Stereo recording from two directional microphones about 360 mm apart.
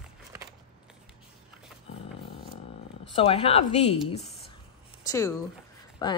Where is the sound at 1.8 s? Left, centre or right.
Centre.